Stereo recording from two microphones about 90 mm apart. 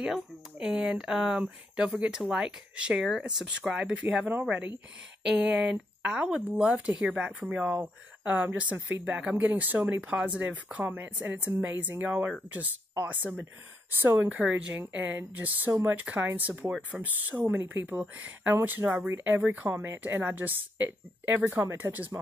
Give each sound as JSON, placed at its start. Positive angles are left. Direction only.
{"t": 0.0, "sound": "speech", "side_deg": -5}